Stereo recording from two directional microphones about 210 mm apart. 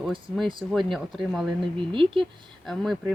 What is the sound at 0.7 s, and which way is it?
Speech, centre (ahead or behind).